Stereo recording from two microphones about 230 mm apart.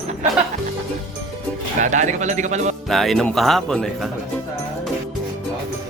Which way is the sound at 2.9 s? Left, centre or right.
Centre.